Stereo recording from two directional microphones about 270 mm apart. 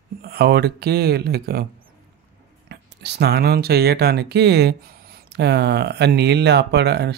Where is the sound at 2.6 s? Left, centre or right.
Right.